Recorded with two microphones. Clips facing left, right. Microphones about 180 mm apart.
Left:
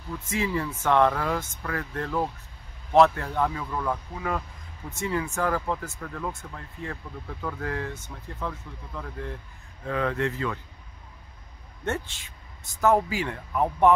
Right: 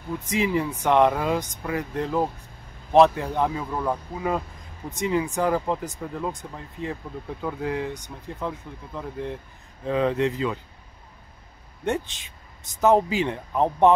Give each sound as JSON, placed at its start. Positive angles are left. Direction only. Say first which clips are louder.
{"t": 0.3, "sound": "speech", "louder": "right 4 dB", "side_deg": -15}
{"t": 11.8, "sound": "speech", "louder": "right 4 dB", "side_deg": -15}